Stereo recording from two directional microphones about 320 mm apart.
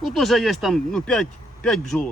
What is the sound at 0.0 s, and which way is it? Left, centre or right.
Speech, centre.